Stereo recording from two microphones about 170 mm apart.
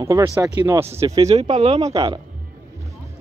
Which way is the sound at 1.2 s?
35° right (ahead or behind).